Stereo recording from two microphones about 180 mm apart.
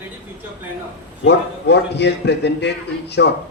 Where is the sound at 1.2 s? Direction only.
70° left (ahead or behind).